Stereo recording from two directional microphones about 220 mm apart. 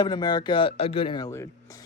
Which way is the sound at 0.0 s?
20° left (ahead or behind).